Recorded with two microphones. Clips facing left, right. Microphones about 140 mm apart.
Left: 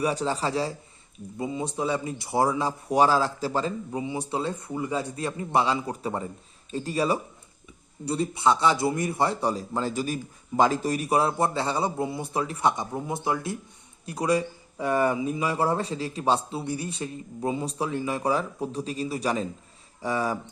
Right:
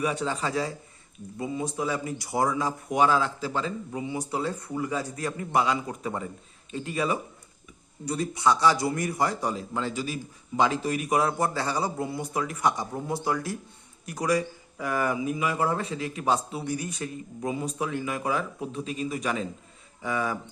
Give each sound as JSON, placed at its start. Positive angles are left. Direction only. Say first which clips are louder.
{"t": 0.0, "sound": "a man's voice", "louder": "left 2 dB", "side_deg": 35}
{"t": 4.0, "sound": "a man's voice", "louder": "even", "side_deg": 25}